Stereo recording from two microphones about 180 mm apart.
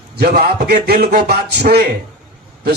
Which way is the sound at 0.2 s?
60° right (ahead or behind).